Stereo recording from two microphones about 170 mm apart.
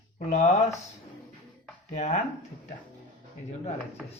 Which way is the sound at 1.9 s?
45° left (ahead or behind).